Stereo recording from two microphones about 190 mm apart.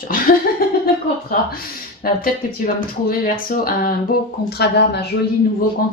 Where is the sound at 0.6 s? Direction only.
50° left (ahead or behind).